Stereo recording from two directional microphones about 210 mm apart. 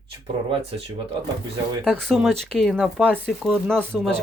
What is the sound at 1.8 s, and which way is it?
Speech, centre (ahead or behind).